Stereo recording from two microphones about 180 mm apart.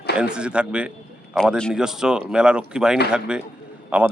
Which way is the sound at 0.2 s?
5° right (ahead or behind).